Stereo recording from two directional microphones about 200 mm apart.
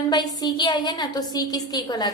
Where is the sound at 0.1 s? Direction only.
20° left (ahead or behind).